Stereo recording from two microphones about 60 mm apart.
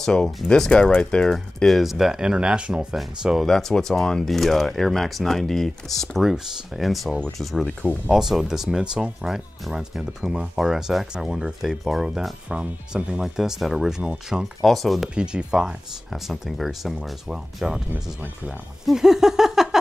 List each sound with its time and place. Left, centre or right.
0.0 s speech: centre
3.4 s speech: centre
12.4 s speech: centre
14.6 s speech: centre
15.1 s speech: centre
16.1 s speech: centre
18.9 s a sound: centre